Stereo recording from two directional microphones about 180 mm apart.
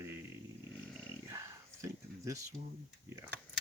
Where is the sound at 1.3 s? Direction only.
15° right (ahead or behind).